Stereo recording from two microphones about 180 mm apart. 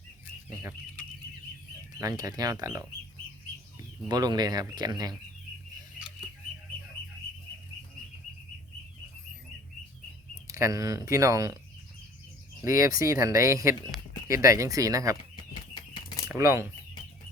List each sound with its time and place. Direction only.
2.0 s speech: 20° right (ahead or behind)
4.1 s speech: 20° right (ahead or behind)
10.4 s speech: 20° right (ahead or behind)
12.6 s speech: 15° right (ahead or behind)
15.7 s bird flight: 25° left (ahead or behind)
16.3 s speech: 15° right (ahead or behind)